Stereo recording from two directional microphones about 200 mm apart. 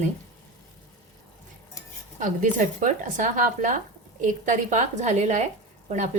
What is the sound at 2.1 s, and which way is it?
A woman's voice, 40° right (ahead or behind).